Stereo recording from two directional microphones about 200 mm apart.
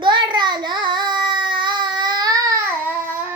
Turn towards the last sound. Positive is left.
turn(degrees=-10)  # may be behind; listen again after turning